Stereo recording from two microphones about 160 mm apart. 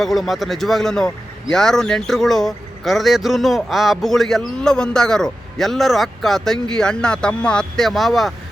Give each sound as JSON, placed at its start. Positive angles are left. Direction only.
{"t": 0.0, "sound": "a man's voice", "side_deg": 0}